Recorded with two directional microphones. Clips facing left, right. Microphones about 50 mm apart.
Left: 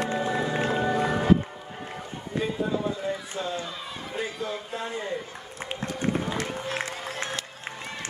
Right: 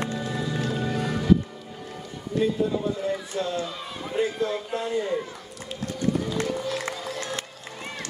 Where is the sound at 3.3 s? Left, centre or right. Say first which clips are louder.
Right 3 dB; centre.